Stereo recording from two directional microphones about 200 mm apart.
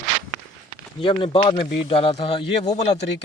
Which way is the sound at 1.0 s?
25° left (ahead or behind).